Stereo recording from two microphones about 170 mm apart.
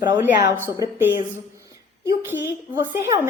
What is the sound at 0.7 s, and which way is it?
A woman's voice, 10° right (ahead or behind).